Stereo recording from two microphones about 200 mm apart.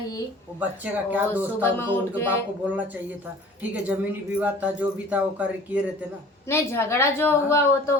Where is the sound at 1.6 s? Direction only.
10° left (ahead or behind).